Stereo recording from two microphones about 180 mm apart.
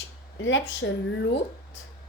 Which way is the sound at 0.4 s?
90° left.